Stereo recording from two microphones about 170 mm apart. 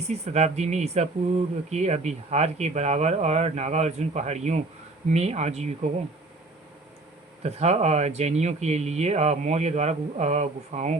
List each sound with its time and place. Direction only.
0.1 s speech: 40° right (ahead or behind)
7.4 s speech: 40° right (ahead or behind)